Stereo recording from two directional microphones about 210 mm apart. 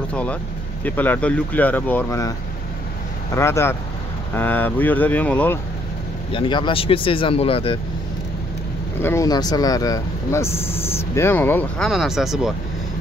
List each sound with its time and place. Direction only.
0.1 s a sound: 5° left (ahead or behind)
0.8 s speech: 10° left (ahead or behind)
3.3 s speech: 10° left (ahead or behind)
6.3 s speech: 25° left (ahead or behind)
9.0 s speech: 15° left (ahead or behind)
11.9 s speech: centre (ahead or behind)